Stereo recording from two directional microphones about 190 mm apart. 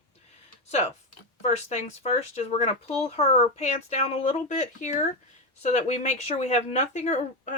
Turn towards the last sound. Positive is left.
turn(degrees=40)  # may be behind; listen again after turning